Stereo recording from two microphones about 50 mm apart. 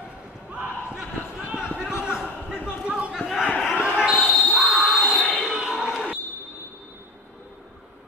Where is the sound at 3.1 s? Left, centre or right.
Centre.